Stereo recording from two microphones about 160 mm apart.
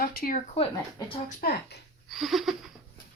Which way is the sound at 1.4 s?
75° left (ahead or behind).